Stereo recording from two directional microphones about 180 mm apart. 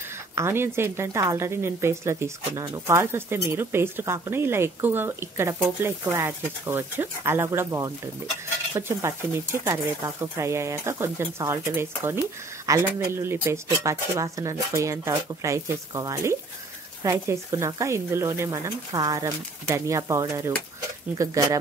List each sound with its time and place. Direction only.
0.4 s speech: 15° right (ahead or behind)